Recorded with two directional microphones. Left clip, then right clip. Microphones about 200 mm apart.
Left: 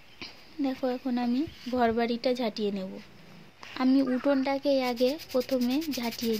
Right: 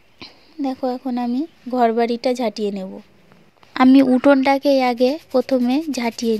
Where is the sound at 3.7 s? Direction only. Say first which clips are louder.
Right 13 dB; 45° right (ahead or behind).